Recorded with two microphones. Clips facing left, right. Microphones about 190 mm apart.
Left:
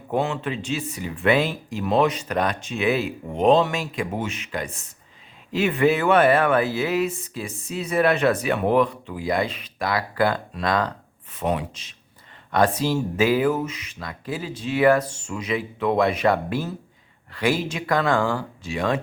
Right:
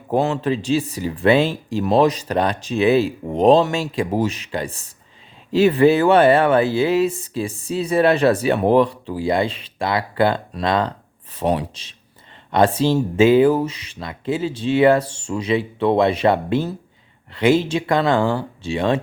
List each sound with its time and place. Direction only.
0.1 s speech: 35° right (ahead or behind)